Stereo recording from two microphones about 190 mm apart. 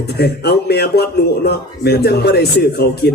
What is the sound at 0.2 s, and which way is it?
A man's voice, 60° left (ahead or behind).